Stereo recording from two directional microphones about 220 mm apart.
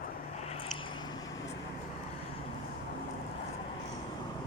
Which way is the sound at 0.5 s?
25° left (ahead or behind).